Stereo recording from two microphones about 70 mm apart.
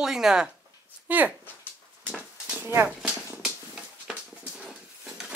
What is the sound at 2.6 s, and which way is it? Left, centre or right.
Speech, right.